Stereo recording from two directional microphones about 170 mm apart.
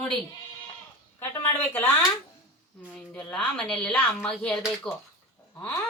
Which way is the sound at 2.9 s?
5° left (ahead or behind).